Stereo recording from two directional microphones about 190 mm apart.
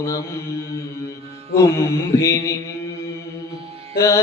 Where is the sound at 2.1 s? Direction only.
15° left (ahead or behind).